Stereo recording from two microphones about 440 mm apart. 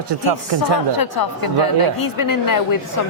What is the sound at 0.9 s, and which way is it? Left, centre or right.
A woman's voice, left.